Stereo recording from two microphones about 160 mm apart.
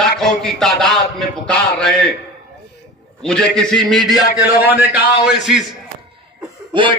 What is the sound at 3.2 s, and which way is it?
A man's voice, 5° left (ahead or behind).